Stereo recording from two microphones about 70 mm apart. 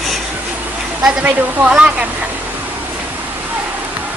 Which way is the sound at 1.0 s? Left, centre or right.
Centre.